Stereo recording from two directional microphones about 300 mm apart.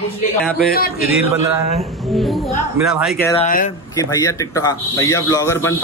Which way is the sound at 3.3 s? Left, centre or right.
Left.